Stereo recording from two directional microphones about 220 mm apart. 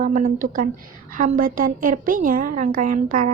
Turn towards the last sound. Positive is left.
turn(degrees=-35)  # may be behind; listen again after turning